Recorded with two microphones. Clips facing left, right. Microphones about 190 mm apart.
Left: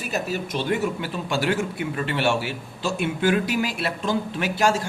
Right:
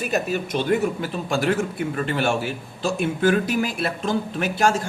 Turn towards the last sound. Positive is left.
turn(degrees=-50)  # may be behind; listen again after turning